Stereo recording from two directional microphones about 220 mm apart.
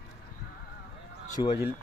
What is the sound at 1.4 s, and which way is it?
Speech, 25° left (ahead or behind).